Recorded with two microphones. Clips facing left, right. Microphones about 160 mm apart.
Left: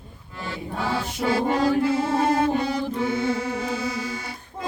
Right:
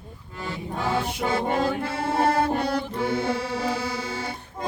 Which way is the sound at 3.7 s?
30° right (ahead or behind).